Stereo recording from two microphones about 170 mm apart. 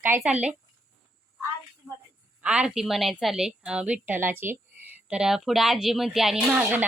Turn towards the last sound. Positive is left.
turn(degrees=-10)  # may be behind; listen again after turning